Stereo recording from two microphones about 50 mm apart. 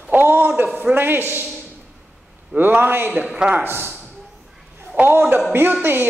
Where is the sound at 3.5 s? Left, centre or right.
Right.